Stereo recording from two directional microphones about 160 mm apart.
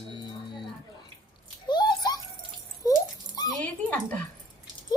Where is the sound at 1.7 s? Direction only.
25° left (ahead or behind).